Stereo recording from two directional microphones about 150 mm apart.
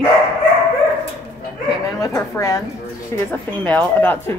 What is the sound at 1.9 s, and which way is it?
A woman's voice, 20° left (ahead or behind).